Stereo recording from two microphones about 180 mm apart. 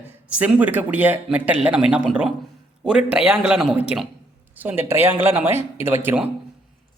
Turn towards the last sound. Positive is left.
turn(degrees=-10)  # may be behind; listen again after turning